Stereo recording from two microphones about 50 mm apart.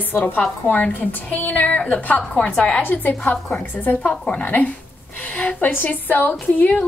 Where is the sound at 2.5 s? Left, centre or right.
Centre.